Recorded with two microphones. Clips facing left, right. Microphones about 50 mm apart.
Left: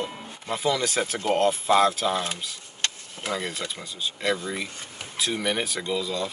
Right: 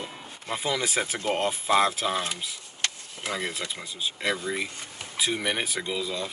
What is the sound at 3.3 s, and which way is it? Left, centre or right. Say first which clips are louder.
Speech: left 1 dB; right.